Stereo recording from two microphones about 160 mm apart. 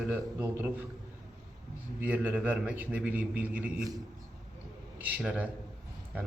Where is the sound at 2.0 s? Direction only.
10° right (ahead or behind).